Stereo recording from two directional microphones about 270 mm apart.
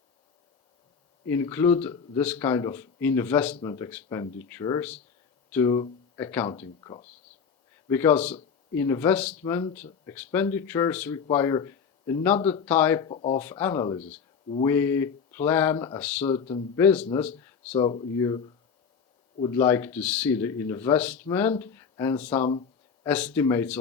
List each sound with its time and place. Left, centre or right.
1.3 s speech: centre
16.4 s speech: centre
16.8 s speech: centre